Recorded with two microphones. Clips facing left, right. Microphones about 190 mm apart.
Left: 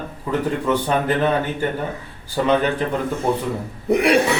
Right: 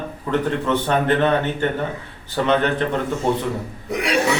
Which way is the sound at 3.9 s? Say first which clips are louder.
Left 6 dB; 55° left (ahead or behind).